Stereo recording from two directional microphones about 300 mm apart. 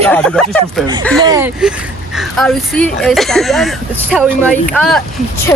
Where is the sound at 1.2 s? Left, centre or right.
Centre.